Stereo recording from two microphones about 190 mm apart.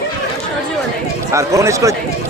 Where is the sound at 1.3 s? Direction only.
15° right (ahead or behind).